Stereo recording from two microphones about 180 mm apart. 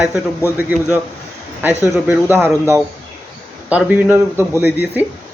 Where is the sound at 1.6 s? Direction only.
10° right (ahead or behind).